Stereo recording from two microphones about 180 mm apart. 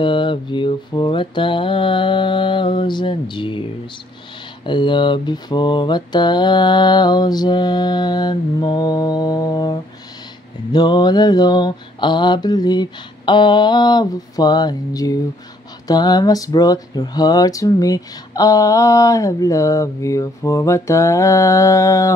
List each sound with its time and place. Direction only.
0.0 s mantra: 25° left (ahead or behind)
4.6 s mantra: 25° left (ahead or behind)
15.9 s a sound: 20° left (ahead or behind)